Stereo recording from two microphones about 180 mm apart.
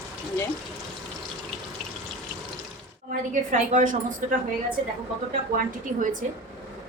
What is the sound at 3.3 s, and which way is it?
Speech, 45° right (ahead or behind).